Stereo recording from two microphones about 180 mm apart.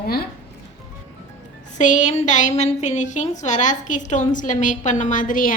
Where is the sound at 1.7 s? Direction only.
45° left (ahead or behind).